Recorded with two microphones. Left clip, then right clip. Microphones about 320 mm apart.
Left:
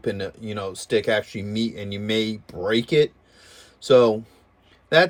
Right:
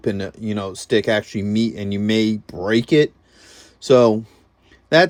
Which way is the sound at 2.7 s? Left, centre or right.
Centre.